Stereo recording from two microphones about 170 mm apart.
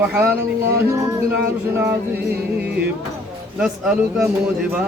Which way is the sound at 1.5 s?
15° right (ahead or behind).